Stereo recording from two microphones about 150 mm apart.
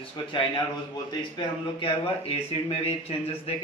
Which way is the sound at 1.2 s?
35° left (ahead or behind).